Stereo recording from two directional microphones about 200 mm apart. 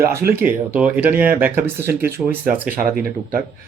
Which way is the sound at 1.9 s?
50° right (ahead or behind).